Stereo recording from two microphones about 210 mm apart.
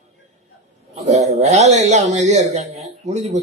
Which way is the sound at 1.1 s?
30° right (ahead or behind).